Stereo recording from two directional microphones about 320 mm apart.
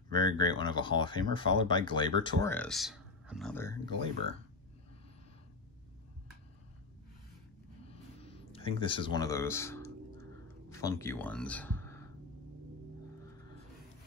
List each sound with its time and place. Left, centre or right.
0.1 s speech: centre
7.9 s a sound: centre
10.7 s speech: centre